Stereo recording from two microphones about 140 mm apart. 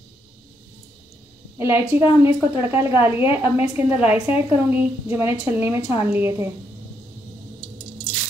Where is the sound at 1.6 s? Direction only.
15° right (ahead or behind).